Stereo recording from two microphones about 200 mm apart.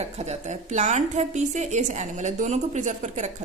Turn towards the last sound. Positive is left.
turn(degrees=-40)  # may be behind; listen again after turning